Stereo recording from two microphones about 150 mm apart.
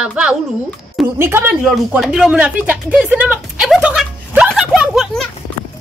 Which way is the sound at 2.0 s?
5° right (ahead or behind).